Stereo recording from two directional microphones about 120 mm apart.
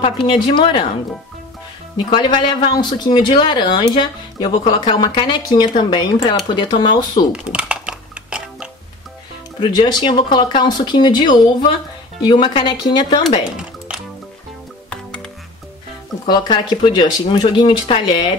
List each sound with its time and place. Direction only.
0.5 s speech: 45° left (ahead or behind)
2.0 s speech: 40° left (ahead or behind)
7.5 s music: 10° right (ahead or behind)
9.6 s speech: 35° left (ahead or behind)
13.4 s music: 5° right (ahead or behind)
14.9 s music: 10° left (ahead or behind)
16.3 s speech: 40° left (ahead or behind)